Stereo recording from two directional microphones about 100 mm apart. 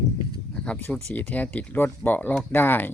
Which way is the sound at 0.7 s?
15° left (ahead or behind).